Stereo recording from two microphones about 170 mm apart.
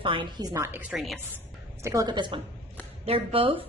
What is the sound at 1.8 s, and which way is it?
A woman's voice, 20° right (ahead or behind).